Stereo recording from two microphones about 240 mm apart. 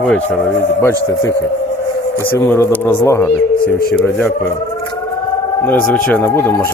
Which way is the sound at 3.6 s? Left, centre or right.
Left.